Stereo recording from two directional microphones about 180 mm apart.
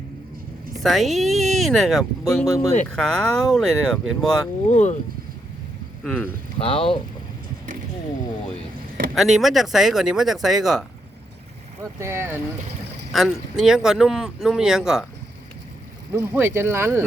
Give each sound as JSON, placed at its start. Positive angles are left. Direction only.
{"t": 0.8, "sound": "speech", "side_deg": 0}
{"t": 4.7, "sound": "speech", "side_deg": 40}
{"t": 6.0, "sound": "speech", "side_deg": 5}
{"t": 6.6, "sound": "speech", "side_deg": 30}
{"t": 9.1, "sound": "speech", "side_deg": 0}
{"t": 11.8, "sound": "speech", "side_deg": -15}
{"t": 13.1, "sound": "speech", "side_deg": 0}
{"t": 16.1, "sound": "speech", "side_deg": -15}